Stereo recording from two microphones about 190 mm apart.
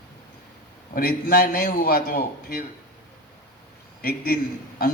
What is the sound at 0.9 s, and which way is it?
A man's voice, 50° left (ahead or behind).